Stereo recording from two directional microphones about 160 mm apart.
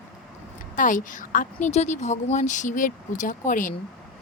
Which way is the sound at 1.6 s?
45° left (ahead or behind).